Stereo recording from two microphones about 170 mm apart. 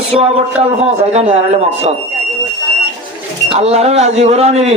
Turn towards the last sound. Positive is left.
turn(degrees=-40)  # may be behind; listen again after turning